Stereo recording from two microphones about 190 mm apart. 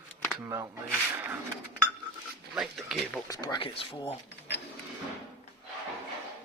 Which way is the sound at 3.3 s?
20° left (ahead or behind).